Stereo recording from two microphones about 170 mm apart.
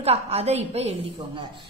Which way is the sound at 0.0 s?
35° right (ahead or behind).